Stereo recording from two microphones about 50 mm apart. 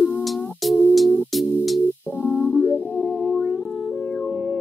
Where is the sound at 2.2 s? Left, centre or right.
Left.